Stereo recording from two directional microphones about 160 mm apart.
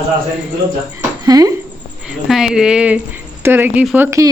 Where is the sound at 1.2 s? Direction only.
25° right (ahead or behind).